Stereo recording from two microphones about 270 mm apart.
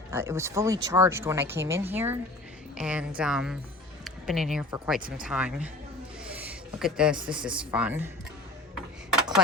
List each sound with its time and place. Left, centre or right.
0.1 s speech: centre
4.9 s speech: right
5.2 s speech: centre
6.3 s a sound: centre
7.3 s speech: centre